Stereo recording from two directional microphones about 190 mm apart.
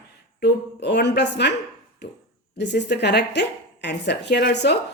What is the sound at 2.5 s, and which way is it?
A woman's voice, 65° left (ahead or behind).